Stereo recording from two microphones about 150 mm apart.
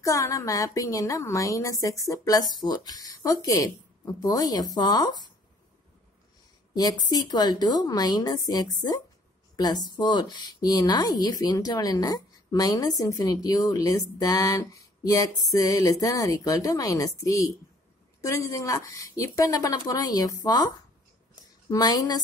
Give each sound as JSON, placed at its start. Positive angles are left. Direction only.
{"t": 0.0, "sound": "speech", "side_deg": 20}
{"t": 6.7, "sound": "speech", "side_deg": 25}